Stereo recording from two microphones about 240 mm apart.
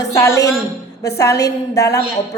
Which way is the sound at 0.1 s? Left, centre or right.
Centre.